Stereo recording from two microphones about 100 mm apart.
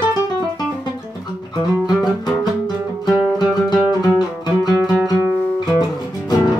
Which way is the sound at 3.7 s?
45° left (ahead or behind).